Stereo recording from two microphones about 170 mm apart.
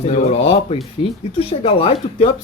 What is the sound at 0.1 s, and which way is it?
Speech, 40° left (ahead or behind).